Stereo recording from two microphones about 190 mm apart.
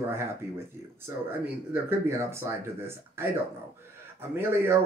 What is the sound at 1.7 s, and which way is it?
Speech, 15° right (ahead or behind).